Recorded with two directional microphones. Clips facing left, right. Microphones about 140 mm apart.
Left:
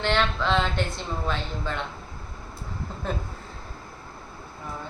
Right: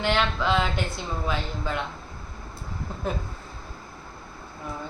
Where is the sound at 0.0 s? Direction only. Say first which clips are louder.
Even; 5° right (ahead or behind).